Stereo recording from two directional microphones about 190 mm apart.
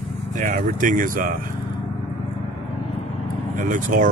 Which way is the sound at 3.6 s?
45° right (ahead or behind).